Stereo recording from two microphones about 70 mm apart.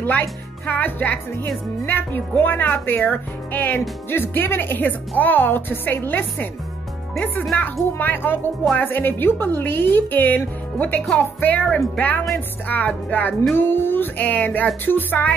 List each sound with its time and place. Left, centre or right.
0.0 s a woman's voice: left
8.0 s a woman's voice: left